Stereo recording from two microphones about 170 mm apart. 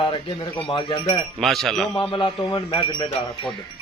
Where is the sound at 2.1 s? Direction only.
25° left (ahead or behind).